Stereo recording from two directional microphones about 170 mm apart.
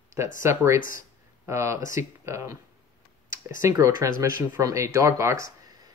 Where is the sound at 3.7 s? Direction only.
15° right (ahead or behind).